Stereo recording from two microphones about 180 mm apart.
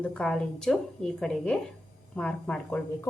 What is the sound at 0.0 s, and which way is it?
Speech, 5° left (ahead or behind).